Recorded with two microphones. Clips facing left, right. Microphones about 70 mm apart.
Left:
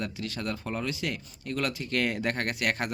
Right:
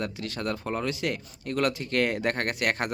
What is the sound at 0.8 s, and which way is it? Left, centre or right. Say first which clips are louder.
Speech: right 3 dB; right.